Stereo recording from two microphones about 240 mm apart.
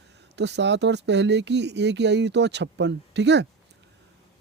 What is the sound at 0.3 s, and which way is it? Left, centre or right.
Speech, right.